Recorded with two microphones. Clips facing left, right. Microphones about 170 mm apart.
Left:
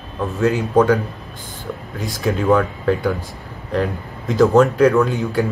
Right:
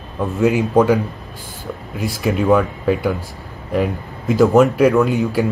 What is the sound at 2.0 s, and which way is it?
A man's voice, 5° right (ahead or behind).